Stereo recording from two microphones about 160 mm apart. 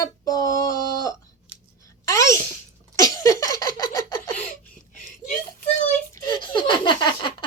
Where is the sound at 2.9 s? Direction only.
20° left (ahead or behind).